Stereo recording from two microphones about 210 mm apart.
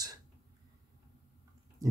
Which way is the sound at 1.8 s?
15° right (ahead or behind).